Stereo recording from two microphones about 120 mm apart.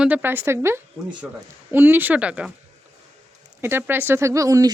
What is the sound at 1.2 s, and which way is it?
Speech, 10° right (ahead or behind).